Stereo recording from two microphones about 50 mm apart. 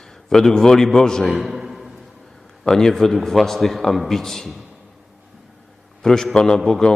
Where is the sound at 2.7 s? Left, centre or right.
Centre.